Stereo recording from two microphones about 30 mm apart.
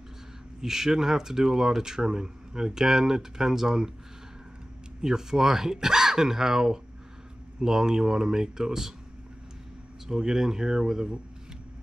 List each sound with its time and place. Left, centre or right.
0.6 s speech: centre
5.0 s speech: centre
10.0 s speech: centre